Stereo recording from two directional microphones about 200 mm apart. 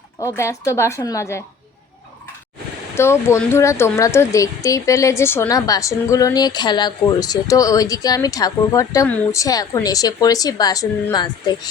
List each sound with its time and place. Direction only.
0.2 s speech: 15° left (ahead or behind)
2.9 s speech: 15° left (ahead or behind)